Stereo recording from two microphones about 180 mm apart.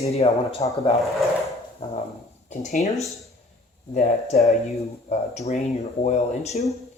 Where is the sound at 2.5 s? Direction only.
40° left (ahead or behind).